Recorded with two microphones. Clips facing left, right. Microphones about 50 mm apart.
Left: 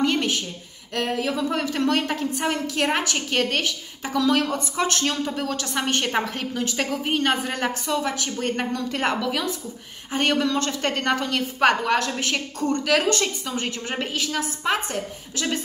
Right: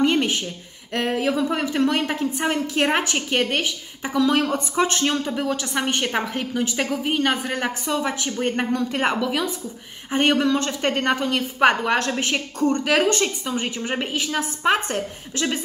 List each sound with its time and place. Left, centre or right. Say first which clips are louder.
0.0 s a sound: right 3 dB; right
0.9 s a woman's voice: right 3 dB; right
2.5 s a woman's voice: right 4 dB; right; by 7.5 s centre
7.5 s a woman's voice: right 1 dB; centre
14.6 s a woman's voice: right 6 dB; right